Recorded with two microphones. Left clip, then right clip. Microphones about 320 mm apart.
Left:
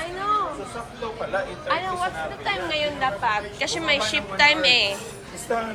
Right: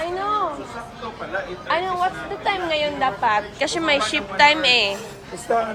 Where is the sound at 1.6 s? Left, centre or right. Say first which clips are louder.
Right 7 dB; centre.